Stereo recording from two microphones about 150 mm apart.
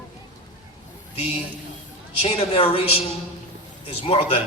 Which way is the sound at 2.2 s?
45° left (ahead or behind).